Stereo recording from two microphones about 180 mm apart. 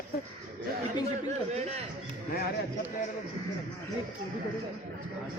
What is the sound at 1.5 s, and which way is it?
Speech, 35° right (ahead or behind).